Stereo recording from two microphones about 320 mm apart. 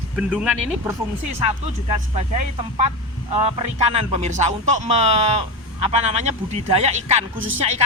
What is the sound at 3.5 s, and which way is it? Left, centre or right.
Speech, centre.